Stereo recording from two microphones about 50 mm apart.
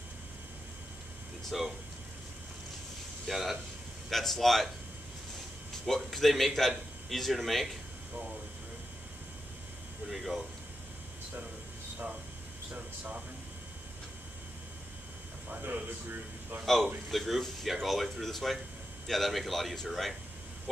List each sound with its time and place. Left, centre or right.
1.5 s speech: centre
3.3 s speech: centre
5.9 s speech: centre
10.0 s speech: centre
12.7 s speech: right
15.6 s a man's voice: right
17.1 s speech: centre